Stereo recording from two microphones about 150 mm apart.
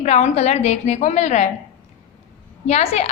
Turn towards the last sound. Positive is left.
turn(degrees=45)  # may be behind; listen again after turning